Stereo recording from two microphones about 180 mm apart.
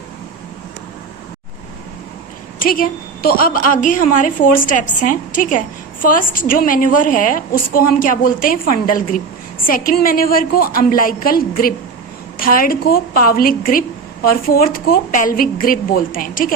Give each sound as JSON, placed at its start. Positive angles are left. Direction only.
{"t": 2.6, "sound": "a woman's voice", "side_deg": 50}